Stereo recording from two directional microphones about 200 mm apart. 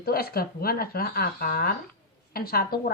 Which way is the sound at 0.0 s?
50° left (ahead or behind).